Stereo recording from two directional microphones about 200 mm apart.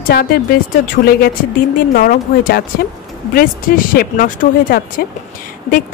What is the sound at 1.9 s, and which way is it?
A woman's voice, 45° left (ahead or behind).